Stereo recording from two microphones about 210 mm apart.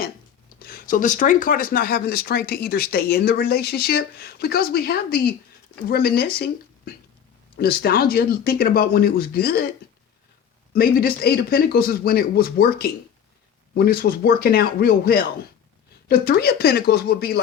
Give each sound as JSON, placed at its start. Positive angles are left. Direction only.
{"t": 0.6, "sound": "speech", "side_deg": 40}
{"t": 10.8, "sound": "speech", "side_deg": 45}